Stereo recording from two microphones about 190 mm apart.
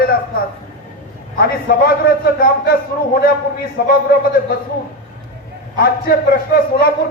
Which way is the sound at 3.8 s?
55° left (ahead or behind).